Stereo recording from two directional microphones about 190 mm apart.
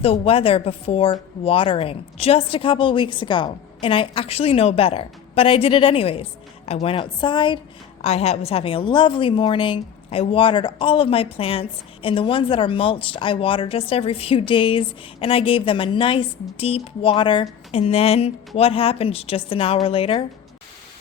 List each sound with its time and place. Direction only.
0.0 s a woman's voice: 30° left (ahead or behind)